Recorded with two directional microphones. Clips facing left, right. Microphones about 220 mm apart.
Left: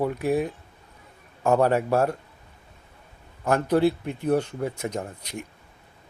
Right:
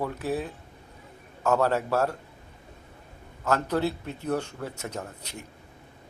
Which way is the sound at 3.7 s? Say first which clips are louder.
Left 6 dB; 10° left (ahead or behind).